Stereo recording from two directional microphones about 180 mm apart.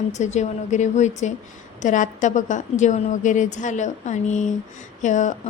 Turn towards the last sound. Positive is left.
turn(degrees=40)  # may be behind; listen again after turning